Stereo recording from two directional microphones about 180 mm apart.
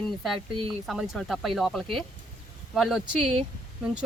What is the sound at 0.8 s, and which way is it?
Speech, centre (ahead or behind).